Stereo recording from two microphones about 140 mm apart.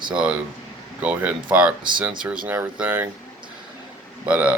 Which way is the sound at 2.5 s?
10° right (ahead or behind).